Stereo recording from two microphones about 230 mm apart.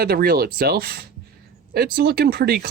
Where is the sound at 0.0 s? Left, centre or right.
Right.